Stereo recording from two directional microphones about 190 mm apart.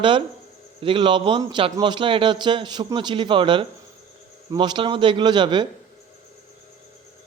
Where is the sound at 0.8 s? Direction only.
25° right (ahead or behind).